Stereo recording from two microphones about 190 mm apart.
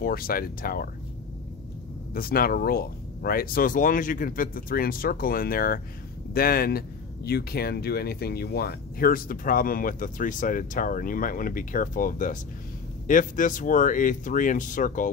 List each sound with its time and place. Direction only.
0.0 s speech: 50° left (ahead or behind)
2.1 s speech: 50° left (ahead or behind)